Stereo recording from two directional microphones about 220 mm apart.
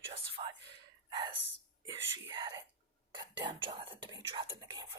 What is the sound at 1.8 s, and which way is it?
Whispering, 20° right (ahead or behind).